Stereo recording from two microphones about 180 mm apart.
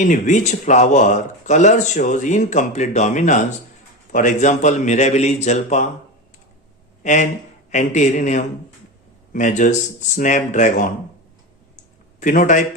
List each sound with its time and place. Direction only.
0.0 s speech: 45° left (ahead or behind)
7.0 s speech: 40° left (ahead or behind)
12.2 s speech: 45° left (ahead or behind)